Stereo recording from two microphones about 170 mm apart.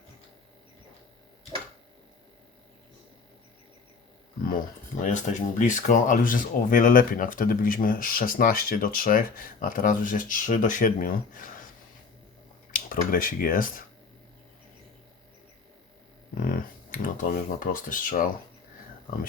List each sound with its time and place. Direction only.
5.0 s speech: 45° left (ahead or behind)
12.7 s speech: 55° left (ahead or behind)
16.4 s speech: 55° left (ahead or behind)